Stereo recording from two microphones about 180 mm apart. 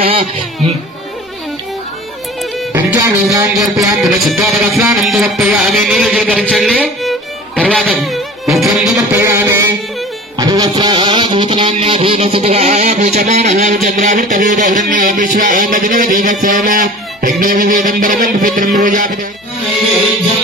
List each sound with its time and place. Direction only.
0.1 s speech: 35° right (ahead or behind)
2.7 s music: 10° right (ahead or behind)
3.7 s music: centre (ahead or behind)
9.2 s a sound: 15° right (ahead or behind)
10.3 s music: 20° right (ahead or behind); by 19.1 s 45° right (ahead or behind)